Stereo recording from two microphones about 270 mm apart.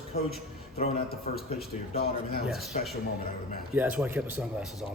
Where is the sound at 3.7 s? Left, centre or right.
Centre.